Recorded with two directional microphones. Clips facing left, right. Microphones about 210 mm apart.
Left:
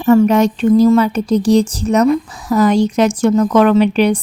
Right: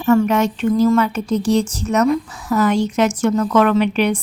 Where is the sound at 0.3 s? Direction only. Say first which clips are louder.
Left 5 dB; 35° left (ahead or behind).